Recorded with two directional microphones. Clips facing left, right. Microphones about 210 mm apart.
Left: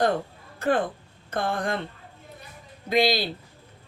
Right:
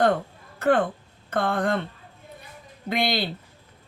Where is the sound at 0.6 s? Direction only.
60° right (ahead or behind).